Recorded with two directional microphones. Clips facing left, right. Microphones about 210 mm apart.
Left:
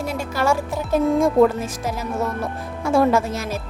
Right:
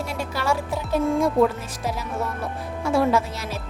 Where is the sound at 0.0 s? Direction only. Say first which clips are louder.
Left 5 dB; 45° left (ahead or behind).